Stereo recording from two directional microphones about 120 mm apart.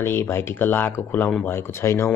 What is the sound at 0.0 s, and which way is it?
Speech, 20° left (ahead or behind).